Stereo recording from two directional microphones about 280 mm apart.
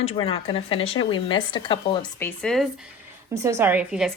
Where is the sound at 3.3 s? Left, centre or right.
Centre.